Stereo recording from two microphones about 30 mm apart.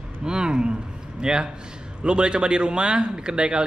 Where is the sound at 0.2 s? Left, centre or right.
Right.